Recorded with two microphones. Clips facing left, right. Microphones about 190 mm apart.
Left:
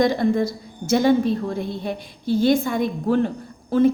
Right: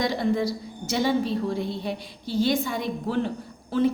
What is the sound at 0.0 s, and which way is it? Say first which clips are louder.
A woman's voice: left 5 dB; 50° left (ahead or behind).